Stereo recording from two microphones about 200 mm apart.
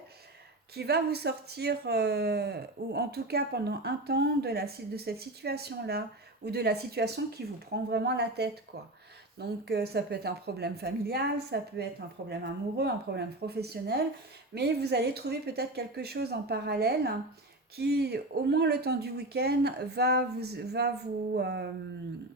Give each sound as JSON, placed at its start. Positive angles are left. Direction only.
{"t": 0.8, "sound": "speech", "side_deg": -55}